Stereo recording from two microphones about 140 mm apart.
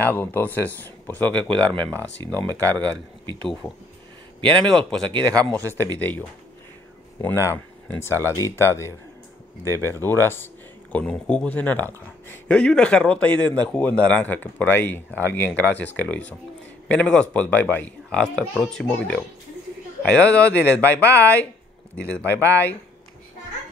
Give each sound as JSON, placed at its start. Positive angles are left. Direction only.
{"t": 0.0, "sound": "speech", "side_deg": 15}
{"t": 1.5, "sound": "speech", "side_deg": -35}
{"t": 5.9, "sound": "speech", "side_deg": 10}